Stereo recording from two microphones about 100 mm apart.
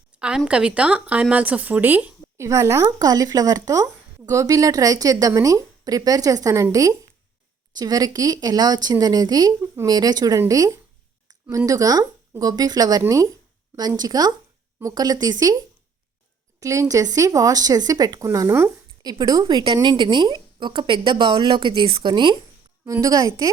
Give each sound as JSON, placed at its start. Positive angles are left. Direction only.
{"t": 0.2, "sound": "speech", "side_deg": -10}
{"t": 2.4, "sound": "a woman's voice", "side_deg": -30}
{"t": 16.6, "sound": "a woman's voice", "side_deg": -35}
{"t": 22.9, "sound": "speech", "side_deg": -35}